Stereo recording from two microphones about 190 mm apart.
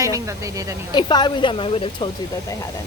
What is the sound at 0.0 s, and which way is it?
Speech, 15° right (ahead or behind).